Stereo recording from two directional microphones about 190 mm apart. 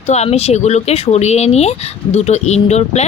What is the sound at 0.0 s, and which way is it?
Speech, 35° left (ahead or behind).